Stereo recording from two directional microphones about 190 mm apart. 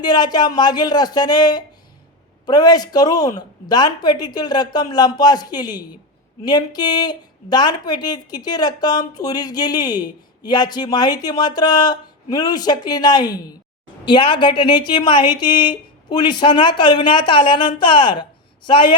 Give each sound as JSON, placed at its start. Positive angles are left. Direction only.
{"t": 0.0, "sound": "a woman's voice", "side_deg": 20}